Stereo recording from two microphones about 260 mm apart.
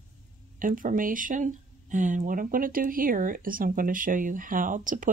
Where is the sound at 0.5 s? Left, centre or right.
Right.